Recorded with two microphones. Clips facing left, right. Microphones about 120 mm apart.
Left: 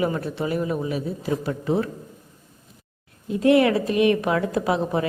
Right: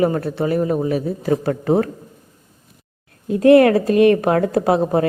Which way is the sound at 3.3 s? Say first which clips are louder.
Right 7 dB; 50° right (ahead or behind).